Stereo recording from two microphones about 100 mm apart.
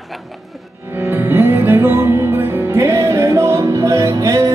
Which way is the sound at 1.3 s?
20° right (ahead or behind).